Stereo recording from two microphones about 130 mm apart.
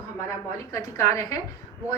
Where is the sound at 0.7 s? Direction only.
25° left (ahead or behind).